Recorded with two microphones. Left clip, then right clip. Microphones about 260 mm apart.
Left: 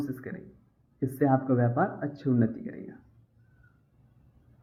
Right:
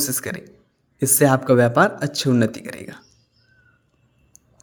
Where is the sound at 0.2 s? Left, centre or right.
Right.